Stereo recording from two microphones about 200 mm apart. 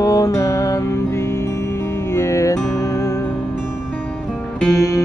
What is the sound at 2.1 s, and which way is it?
Music, 15° left (ahead or behind).